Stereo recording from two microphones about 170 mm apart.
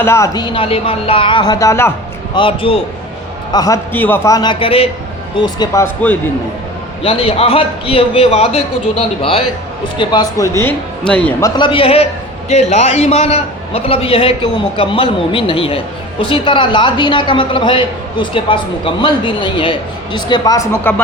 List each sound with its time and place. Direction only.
0.0 s a woman's voice: 15° left (ahead or behind)
2.3 s a man's voice: 30° left (ahead or behind)
3.5 s a woman's voice: 20° left (ahead or behind)
5.4 s speech: 20° left (ahead or behind)
7.0 s a man's voice: 35° left (ahead or behind); by 11.2 s 10° left (ahead or behind)
11.3 s a woman's voice: 20° left (ahead or behind)